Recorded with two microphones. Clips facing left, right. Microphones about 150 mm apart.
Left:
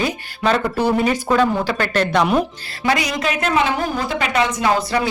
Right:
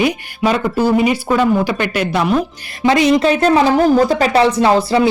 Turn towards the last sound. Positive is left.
turn(degrees=-30)  # may be behind; listen again after turning